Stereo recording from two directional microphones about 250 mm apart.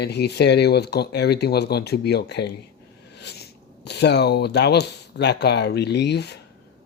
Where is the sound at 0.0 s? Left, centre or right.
Left.